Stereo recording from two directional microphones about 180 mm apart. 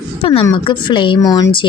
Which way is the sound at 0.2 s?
30° left (ahead or behind).